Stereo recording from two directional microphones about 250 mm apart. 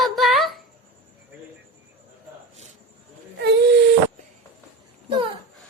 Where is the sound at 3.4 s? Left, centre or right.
Right.